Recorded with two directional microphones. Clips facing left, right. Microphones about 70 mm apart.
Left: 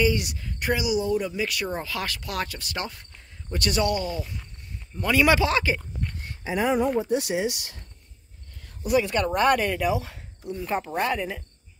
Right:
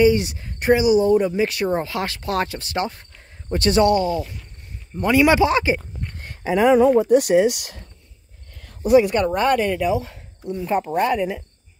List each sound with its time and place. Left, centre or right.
0.0 s speech: right
5.0 s a man's voice: centre
6.1 s a sound: right
7.0 s speech: right
9.0 s speech: centre